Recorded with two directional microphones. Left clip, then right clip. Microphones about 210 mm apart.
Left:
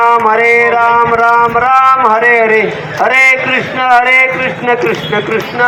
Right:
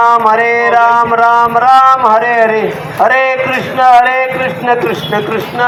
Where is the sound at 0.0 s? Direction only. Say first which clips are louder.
Even; 20° right (ahead or behind).